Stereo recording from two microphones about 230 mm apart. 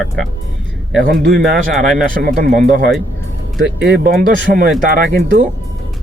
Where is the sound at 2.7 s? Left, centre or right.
Centre.